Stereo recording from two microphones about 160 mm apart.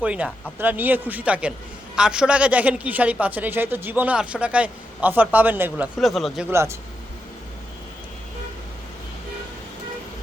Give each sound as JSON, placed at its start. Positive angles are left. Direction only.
{"t": 0.0, "sound": "speech", "side_deg": -10}
{"t": 6.0, "sound": "speech", "side_deg": 0}
{"t": 6.5, "sound": "speech", "side_deg": -15}